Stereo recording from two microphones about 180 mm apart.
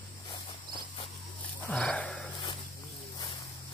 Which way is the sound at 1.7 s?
5° left (ahead or behind).